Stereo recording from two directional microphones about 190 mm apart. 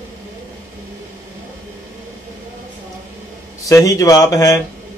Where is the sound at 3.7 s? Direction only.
15° left (ahead or behind).